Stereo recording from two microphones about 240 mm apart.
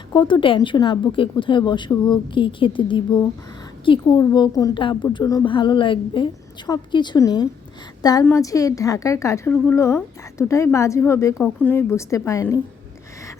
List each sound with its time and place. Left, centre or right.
0.1 s a woman's voice: centre